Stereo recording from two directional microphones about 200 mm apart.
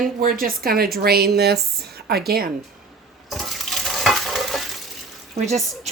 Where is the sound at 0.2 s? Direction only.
45° right (ahead or behind).